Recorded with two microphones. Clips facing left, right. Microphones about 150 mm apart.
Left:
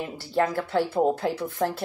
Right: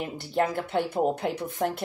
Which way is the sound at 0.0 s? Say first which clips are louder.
Left 1 dB; 20° right (ahead or behind).